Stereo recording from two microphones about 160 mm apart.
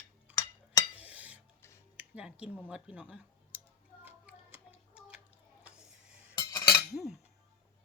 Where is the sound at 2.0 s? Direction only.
10° right (ahead or behind).